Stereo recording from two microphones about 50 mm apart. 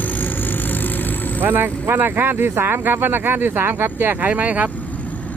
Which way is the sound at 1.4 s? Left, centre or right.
Right.